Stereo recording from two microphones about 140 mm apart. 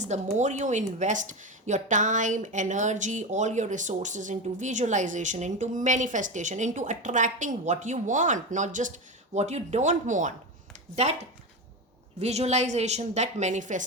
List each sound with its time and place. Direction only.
0.0 s a woman's voice: 60° right (ahead or behind)